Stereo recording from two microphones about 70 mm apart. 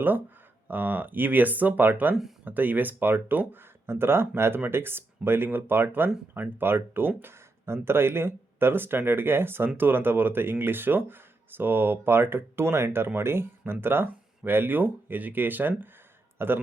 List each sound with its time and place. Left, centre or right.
0.7 s speech: right